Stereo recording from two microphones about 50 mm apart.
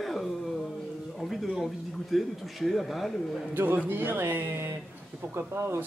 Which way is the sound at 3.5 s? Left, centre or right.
Right.